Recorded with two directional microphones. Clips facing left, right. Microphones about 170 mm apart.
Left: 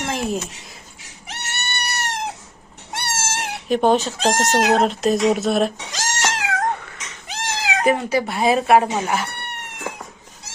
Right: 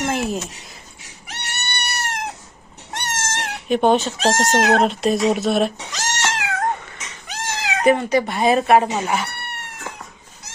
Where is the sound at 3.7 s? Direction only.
Centre (ahead or behind).